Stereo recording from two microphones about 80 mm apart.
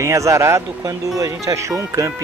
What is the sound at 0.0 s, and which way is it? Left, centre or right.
Speech, right.